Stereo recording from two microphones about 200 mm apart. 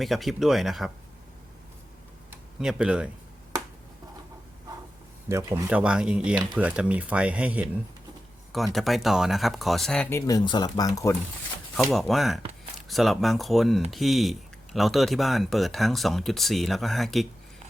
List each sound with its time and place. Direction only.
0.0 s speech: centre (ahead or behind)
2.6 s speech: 5° right (ahead or behind)
5.3 s speech: 15° right (ahead or behind)
5.6 s speech: 5° right (ahead or behind); by 11.2 s 15° left (ahead or behind)
11.8 s speech: centre (ahead or behind)